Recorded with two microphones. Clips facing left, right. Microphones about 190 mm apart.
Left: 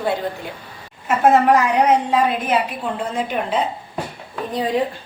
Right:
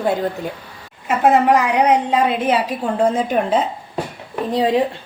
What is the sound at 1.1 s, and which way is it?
A woman's voice, 15° right (ahead or behind).